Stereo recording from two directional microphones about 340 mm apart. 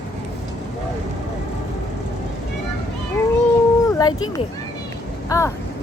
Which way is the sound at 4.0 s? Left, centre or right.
Centre.